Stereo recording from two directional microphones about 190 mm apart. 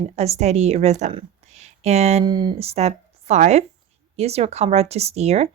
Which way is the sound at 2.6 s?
35° right (ahead or behind).